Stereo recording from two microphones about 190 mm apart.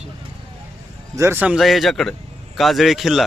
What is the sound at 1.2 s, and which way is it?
Speech, 10° right (ahead or behind).